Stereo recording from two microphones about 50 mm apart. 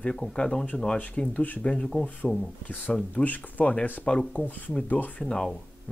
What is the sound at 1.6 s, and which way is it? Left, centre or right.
Speech, centre.